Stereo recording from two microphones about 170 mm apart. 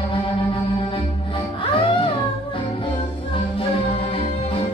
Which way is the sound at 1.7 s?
30° left (ahead or behind).